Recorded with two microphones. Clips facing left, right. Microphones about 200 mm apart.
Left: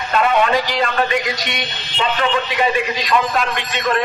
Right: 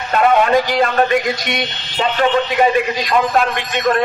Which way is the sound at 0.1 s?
45° right (ahead or behind).